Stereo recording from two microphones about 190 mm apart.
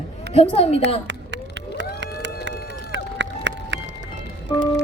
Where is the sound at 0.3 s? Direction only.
30° left (ahead or behind).